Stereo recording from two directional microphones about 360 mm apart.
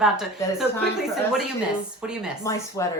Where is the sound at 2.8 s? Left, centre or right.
Centre.